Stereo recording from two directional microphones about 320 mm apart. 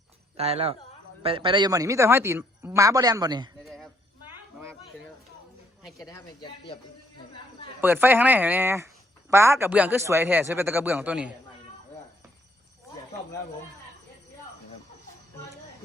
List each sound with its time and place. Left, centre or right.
0.3 s speech: centre
3.6 s a sound: centre
6.0 s speech: centre
7.8 s speech: centre